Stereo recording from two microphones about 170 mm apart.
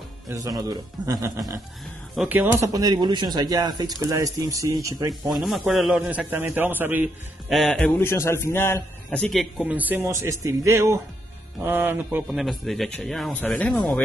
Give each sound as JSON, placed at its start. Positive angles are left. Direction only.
{"t": 0.3, "sound": "speech", "side_deg": -20}
{"t": 5.3, "sound": "a man's voice", "side_deg": 0}
{"t": 7.5, "sound": "speech", "side_deg": 5}
{"t": 8.0, "sound": "a man's voice", "side_deg": 15}
{"t": 9.6, "sound": "a man's voice", "side_deg": -10}
{"t": 12.4, "sound": "speech", "side_deg": 0}